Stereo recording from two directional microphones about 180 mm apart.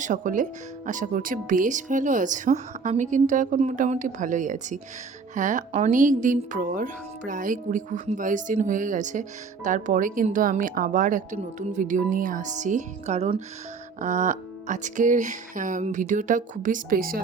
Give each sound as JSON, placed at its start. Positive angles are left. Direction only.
{"t": 0.0, "sound": "speech", "side_deg": -45}